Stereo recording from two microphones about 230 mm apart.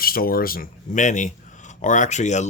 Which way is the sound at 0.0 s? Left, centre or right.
Left.